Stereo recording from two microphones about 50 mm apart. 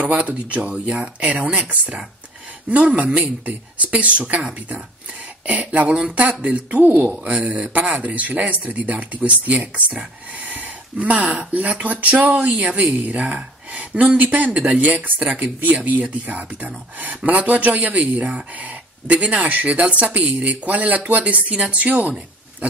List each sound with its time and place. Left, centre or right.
0.0 s speech: right
5.9 s speech: centre
6.4 s speech: right
15.2 s speech: right